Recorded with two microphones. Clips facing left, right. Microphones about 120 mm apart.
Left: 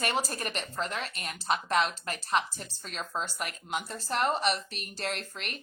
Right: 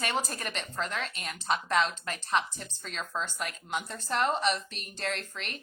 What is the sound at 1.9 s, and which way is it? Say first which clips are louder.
Speech: even; 35° left (ahead or behind).